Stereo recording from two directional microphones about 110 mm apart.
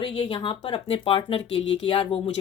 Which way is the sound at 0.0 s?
50° left (ahead or behind).